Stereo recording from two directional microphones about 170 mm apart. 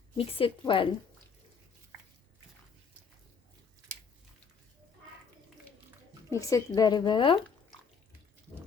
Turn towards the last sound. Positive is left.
turn(degrees=30)  # may be behind; listen again after turning